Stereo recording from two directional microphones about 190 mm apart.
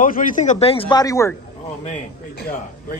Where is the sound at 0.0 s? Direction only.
45° left (ahead or behind); by 1.3 s 15° left (ahead or behind).